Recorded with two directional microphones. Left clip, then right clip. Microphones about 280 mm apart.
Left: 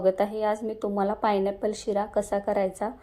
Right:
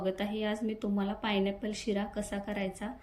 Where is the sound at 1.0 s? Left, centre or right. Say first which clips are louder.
Left 8 dB; left.